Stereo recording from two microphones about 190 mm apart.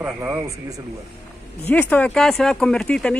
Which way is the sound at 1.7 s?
10° left (ahead or behind).